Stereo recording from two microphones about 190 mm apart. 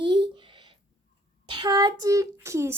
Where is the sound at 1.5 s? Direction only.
20° right (ahead or behind).